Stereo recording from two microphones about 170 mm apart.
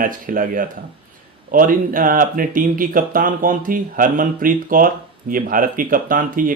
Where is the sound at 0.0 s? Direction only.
55° right (ahead or behind).